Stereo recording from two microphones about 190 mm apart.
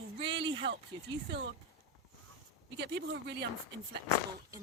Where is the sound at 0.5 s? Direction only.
70° right (ahead or behind).